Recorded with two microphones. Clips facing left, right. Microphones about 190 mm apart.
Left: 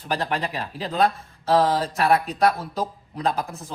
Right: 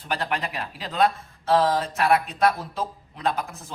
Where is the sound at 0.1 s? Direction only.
35° left (ahead or behind).